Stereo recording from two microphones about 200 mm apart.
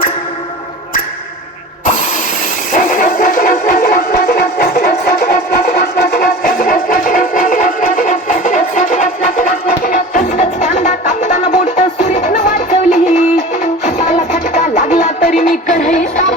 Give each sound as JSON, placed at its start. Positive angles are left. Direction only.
{"t": 2.7, "sound": "music", "side_deg": 45}